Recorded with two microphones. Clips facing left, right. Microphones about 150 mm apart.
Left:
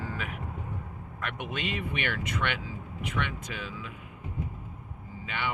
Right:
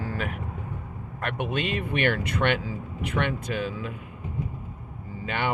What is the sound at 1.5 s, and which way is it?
Speech, 50° right (ahead or behind).